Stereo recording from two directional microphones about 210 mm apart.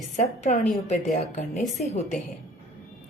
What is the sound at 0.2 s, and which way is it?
A woman's voice, 35° left (ahead or behind).